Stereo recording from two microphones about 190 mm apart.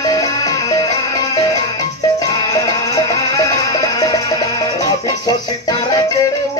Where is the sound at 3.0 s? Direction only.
15° left (ahead or behind).